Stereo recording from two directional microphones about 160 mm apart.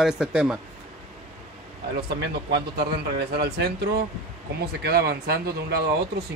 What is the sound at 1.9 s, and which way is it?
Speech, 90° right.